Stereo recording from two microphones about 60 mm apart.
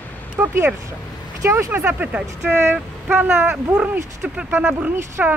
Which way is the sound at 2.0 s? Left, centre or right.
Right.